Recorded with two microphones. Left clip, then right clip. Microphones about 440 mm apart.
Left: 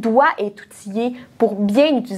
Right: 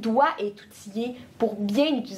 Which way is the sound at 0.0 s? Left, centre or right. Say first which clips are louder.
Left 7 dB; left.